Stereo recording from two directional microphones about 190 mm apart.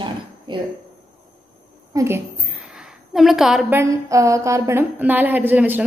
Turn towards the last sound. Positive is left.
turn(degrees=-10)  # may be behind; listen again after turning